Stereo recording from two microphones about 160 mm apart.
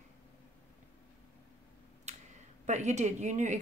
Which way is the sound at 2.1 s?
45° right (ahead or behind).